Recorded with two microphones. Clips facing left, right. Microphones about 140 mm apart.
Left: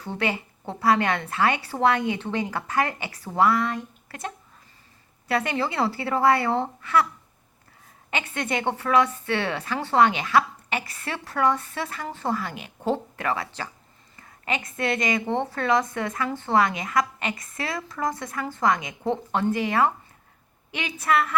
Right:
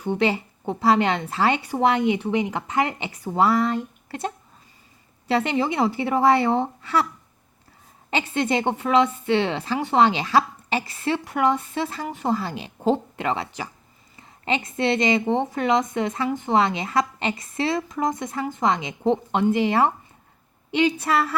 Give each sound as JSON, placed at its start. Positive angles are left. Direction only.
{"t": 0.0, "sound": "a woman's voice", "side_deg": -20}
{"t": 5.3, "sound": "a woman's voice", "side_deg": -25}
{"t": 8.1, "sound": "a woman's voice", "side_deg": -25}
{"t": 12.4, "sound": "a woman's voice", "side_deg": -30}